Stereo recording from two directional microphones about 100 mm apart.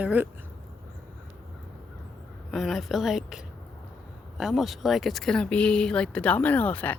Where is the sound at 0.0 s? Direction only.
15° right (ahead or behind).